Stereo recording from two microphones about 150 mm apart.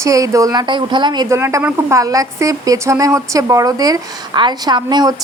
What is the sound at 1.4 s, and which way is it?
A woman's voice, 15° right (ahead or behind).